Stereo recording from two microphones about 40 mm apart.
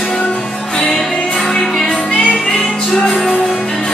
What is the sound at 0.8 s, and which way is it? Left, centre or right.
Music, centre.